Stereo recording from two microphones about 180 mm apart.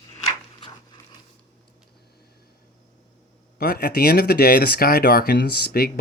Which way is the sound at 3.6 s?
60° left (ahead or behind).